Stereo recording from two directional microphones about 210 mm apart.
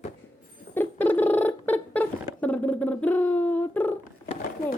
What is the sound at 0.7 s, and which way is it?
Rodents, 10° left (ahead or behind).